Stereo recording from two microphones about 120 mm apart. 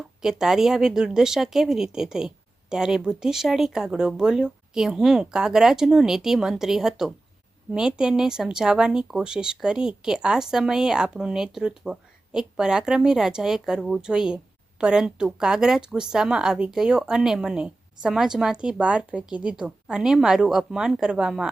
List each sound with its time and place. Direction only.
0.2 s speech: 5° right (ahead or behind)